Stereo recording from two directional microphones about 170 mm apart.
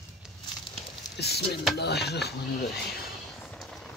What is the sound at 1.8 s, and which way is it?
Speech, 75° left (ahead or behind).